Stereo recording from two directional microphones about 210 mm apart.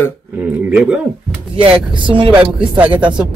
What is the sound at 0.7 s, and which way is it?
Speech, 5° right (ahead or behind).